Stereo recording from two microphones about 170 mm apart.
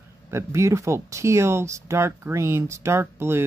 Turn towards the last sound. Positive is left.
turn(degrees=-15)  # may be behind; listen again after turning